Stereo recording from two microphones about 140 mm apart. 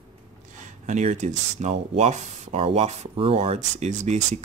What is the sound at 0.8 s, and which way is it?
Speech, 55° right (ahead or behind).